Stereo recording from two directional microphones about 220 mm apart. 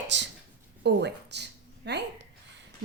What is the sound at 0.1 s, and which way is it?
Speech, 55° right (ahead or behind).